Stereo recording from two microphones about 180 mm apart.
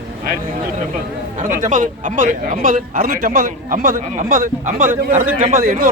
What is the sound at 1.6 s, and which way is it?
A man's voice, 45° right (ahead or behind).